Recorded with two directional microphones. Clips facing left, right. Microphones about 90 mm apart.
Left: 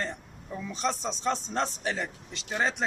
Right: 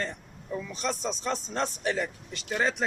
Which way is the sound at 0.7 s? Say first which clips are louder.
Left 3 dB; 30° left (ahead or behind).